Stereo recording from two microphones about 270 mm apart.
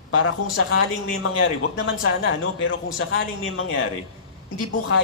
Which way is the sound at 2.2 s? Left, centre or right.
Left.